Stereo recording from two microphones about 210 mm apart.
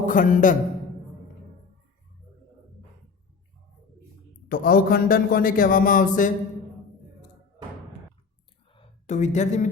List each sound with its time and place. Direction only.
0.0 s a man's voice: 40° left (ahead or behind)
4.4 s a man's voice: 45° left (ahead or behind)
8.7 s a sound: 30° left (ahead or behind)